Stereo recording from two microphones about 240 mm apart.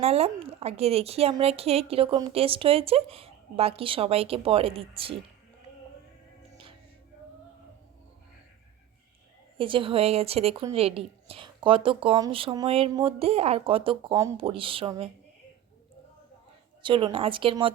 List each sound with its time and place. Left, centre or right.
0.0 s speech: right
9.6 s speech: right
16.8 s speech: right